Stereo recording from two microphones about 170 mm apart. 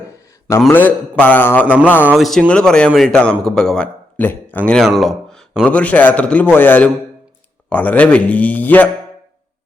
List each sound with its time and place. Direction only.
0.1 s a sound: 15° left (ahead or behind)
0.7 s a man's voice: 10° left (ahead or behind)
1.6 s music: 10° right (ahead or behind)
2.0 s a man's voice: centre (ahead or behind)